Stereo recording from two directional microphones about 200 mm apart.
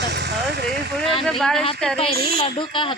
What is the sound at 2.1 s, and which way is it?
Speech, 50° right (ahead or behind).